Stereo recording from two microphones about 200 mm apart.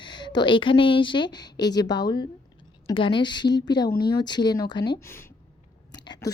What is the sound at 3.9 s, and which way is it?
Speech, 50° left (ahead or behind).